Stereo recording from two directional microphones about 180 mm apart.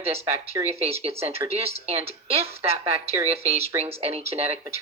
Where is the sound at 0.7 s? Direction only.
35° right (ahead or behind).